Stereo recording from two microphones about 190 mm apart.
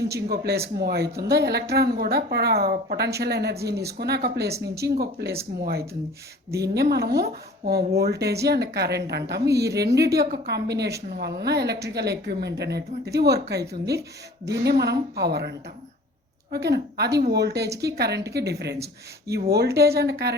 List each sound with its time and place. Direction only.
0.2 s a woman's voice: 55° right (ahead or behind)
6.5 s a woman's voice: 55° right (ahead or behind)